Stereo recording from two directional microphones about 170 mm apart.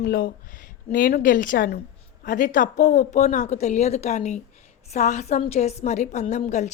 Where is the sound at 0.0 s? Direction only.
65° left (ahead or behind).